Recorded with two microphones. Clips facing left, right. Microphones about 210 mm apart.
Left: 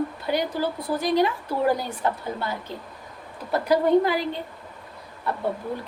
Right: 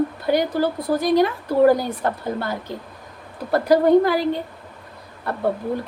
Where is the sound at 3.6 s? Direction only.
40° right (ahead or behind).